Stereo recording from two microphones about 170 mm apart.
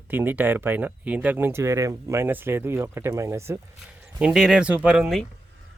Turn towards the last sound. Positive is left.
turn(degrees=0)  # may be behind; listen again after turning